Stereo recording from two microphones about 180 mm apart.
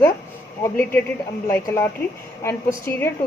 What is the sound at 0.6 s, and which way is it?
A woman's voice, 15° left (ahead or behind).